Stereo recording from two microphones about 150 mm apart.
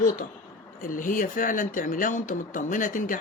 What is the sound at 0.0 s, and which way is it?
A woman's voice, 65° left (ahead or behind).